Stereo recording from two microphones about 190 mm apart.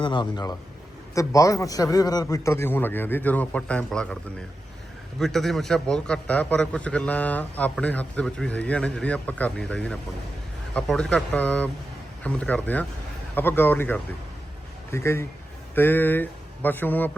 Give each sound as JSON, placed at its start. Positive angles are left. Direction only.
{"t": 0.0, "sound": "a man's voice", "side_deg": 25}
{"t": 5.2, "sound": "a man's voice", "side_deg": 0}